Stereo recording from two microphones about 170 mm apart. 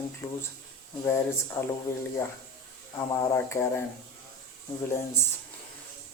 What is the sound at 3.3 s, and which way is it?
Speech, 15° left (ahead or behind).